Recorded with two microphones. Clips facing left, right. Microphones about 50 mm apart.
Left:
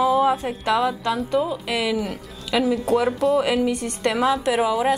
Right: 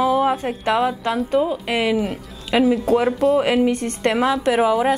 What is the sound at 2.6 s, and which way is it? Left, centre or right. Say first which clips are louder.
Speech: right 3 dB; centre.